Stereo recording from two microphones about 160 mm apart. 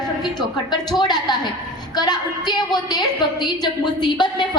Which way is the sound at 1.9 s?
25° left (ahead or behind).